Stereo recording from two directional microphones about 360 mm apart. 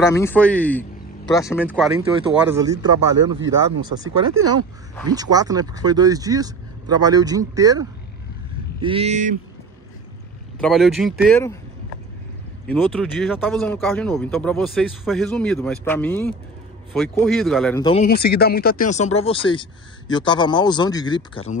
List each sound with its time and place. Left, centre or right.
0.0 s speech: centre
2.0 s speech: centre
4.4 s speech: right
5.1 s speech: centre
8.8 s speech: centre
10.6 s speech: centre
12.6 s speech: centre
17.8 s speech: left